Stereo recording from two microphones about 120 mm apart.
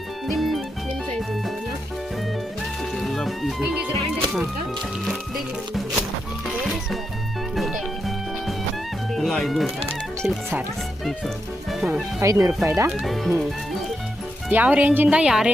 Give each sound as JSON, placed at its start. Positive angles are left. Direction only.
{"t": 0.3, "sound": "music", "side_deg": 0}
{"t": 3.0, "sound": "music", "side_deg": 0}
{"t": 7.5, "sound": "music", "side_deg": 0}
{"t": 9.1, "sound": "speech", "side_deg": 5}
{"t": 12.2, "sound": "speech", "side_deg": -25}
{"t": 12.9, "sound": "speech", "side_deg": 0}
{"t": 14.5, "sound": "speech", "side_deg": -15}